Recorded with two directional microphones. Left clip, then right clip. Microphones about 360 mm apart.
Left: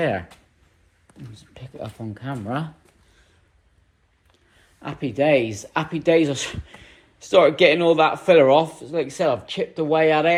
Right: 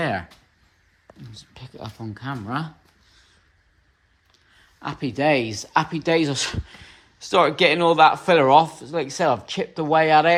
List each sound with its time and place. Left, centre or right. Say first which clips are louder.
0.0 s speech: left 2 dB; centre
4.8 s speech: left 1 dB; centre